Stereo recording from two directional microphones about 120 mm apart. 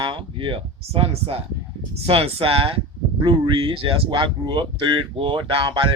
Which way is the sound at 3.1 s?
35° right (ahead or behind).